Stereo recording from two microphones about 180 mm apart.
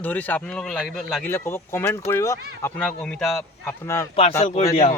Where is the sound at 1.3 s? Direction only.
15° left (ahead or behind).